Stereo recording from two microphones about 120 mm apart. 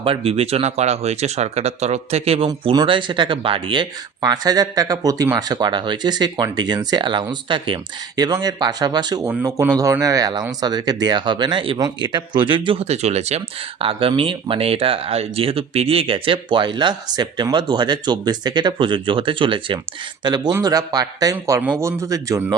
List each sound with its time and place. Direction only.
0.0 s speech: 50° right (ahead or behind)
2.6 s speech: 45° right (ahead or behind)
9.2 s speech: 25° right (ahead or behind); by 12.8 s 45° right (ahead or behind)
12.8 s speech: 65° right (ahead or behind); by 19.8 s 45° right (ahead or behind)
20.2 s speech: 35° right (ahead or behind)